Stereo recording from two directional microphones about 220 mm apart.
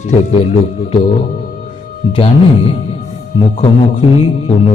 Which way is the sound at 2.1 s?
25° left (ahead or behind).